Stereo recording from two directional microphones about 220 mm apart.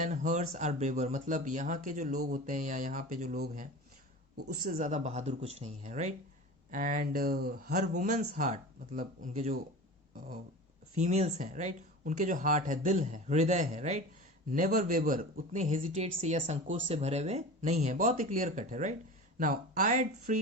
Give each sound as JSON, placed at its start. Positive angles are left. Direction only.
{"t": 0.0, "sound": "speech", "side_deg": -35}
{"t": 10.9, "sound": "speech", "side_deg": -30}